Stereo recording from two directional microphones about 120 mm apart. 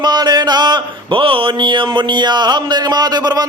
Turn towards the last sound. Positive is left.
turn(degrees=-35)  # may be behind; listen again after turning